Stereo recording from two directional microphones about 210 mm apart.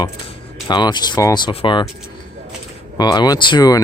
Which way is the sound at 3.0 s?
20° left (ahead or behind).